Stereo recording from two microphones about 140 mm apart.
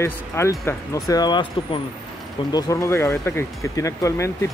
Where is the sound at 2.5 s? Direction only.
20° left (ahead or behind).